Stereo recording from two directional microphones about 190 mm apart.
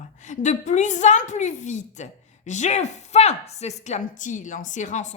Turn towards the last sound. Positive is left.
turn(degrees=40)  # may be behind; listen again after turning